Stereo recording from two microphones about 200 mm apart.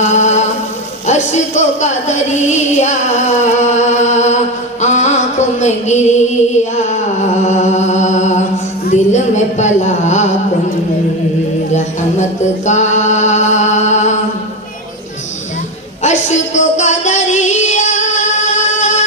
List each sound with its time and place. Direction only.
0.1 s mantra: 35° left (ahead or behind)
1.0 s music: 35° left (ahead or behind)
12.2 s music: 35° left (ahead or behind)
16.0 s music: 35° left (ahead or behind)